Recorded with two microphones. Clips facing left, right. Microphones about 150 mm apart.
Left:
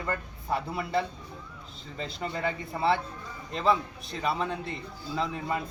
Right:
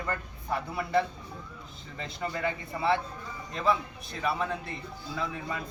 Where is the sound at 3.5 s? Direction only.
30° left (ahead or behind).